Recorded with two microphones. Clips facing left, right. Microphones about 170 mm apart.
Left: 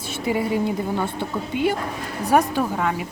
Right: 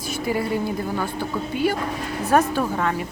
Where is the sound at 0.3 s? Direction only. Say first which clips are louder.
Left 2 dB; 20° left (ahead or behind).